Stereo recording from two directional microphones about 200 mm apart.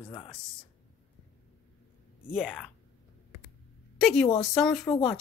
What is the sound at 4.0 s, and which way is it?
Speech, 5° left (ahead or behind).